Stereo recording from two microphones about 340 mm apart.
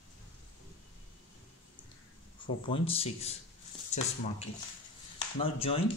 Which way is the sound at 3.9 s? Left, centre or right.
Centre.